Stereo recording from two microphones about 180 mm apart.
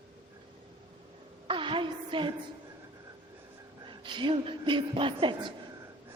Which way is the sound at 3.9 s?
25° right (ahead or behind).